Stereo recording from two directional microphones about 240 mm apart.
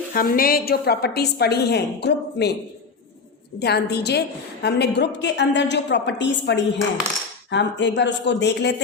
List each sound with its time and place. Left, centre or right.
0.1 s a woman's voice: left
3.6 s a woman's voice: left